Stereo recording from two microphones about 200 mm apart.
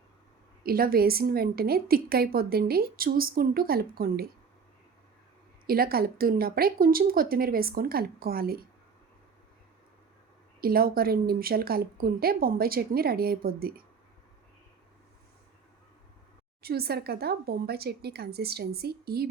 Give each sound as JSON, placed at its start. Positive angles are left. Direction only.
{"t": 0.6, "sound": "a woman's voice", "side_deg": -50}
{"t": 5.6, "sound": "a woman's voice", "side_deg": -50}
{"t": 10.6, "sound": "a woman's voice", "side_deg": -50}
{"t": 16.6, "sound": "a woman's voice", "side_deg": -50}